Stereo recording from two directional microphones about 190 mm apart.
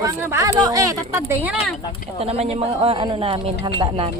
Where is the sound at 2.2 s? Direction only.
30° right (ahead or behind).